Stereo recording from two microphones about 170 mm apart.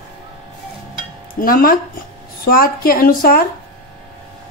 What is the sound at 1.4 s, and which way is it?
A woman's voice, 60° left (ahead or behind).